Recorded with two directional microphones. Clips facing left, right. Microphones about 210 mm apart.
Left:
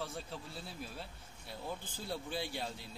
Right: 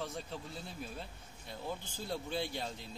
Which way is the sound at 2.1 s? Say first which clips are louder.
Right 2 dB; 5° left (ahead or behind).